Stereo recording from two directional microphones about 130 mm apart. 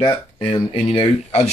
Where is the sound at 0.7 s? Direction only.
45° left (ahead or behind).